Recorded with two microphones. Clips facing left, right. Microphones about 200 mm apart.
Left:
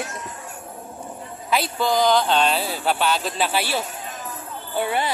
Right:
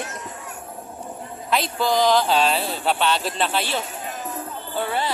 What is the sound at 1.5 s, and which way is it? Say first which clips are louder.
A woman's voice: even; centre (ahead or behind).